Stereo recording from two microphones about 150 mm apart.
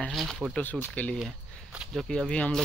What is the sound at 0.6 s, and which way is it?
Speech, 10° left (ahead or behind).